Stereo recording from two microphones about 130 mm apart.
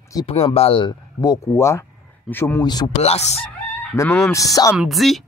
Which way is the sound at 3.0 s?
55° left (ahead or behind).